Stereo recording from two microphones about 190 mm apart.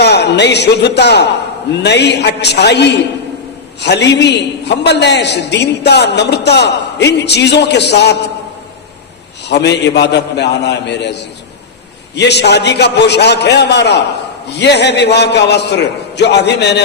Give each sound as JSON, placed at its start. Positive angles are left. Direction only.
{"t": 0.0, "sound": "a man's voice", "side_deg": 60}
{"t": 9.5, "sound": "a man's voice", "side_deg": 65}